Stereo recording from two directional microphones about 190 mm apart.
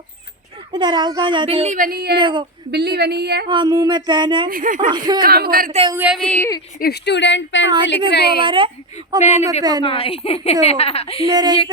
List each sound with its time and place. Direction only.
0.7 s speech: 25° right (ahead or behind); by 2.1 s 55° right (ahead or behind)
2.1 s speech: 25° right (ahead or behind)
2.7 s a woman's voice: 55° right (ahead or behind)
3.4 s speech: 25° right (ahead or behind)
4.4 s speech: 45° right (ahead or behind)
4.9 s speech: 20° right (ahead or behind)
5.2 s speech: 50° right (ahead or behind)
5.9 s a woman's voice: 10° right (ahead or behind)
6.2 s a woman's voice: 10° left (ahead or behind)
6.7 s speech: 55° left (ahead or behind); by 7.7 s 75° left (ahead or behind)
8.1 s speech: 60° left (ahead or behind)
8.4 s speech: 25° right (ahead or behind)
9.8 s a woman's voice: 30° left (ahead or behind)
11.3 s speech: 20° right (ahead or behind)